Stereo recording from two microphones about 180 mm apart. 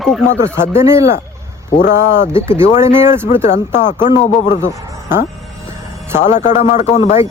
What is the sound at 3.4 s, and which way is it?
Speech, 40° left (ahead or behind).